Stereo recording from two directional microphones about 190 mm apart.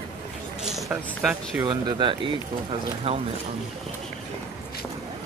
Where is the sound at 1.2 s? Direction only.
5° right (ahead or behind).